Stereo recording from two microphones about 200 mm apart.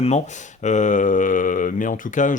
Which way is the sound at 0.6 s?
35° left (ahead or behind).